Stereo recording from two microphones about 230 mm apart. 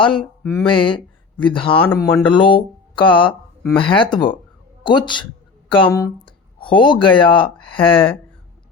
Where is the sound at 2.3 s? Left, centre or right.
Left.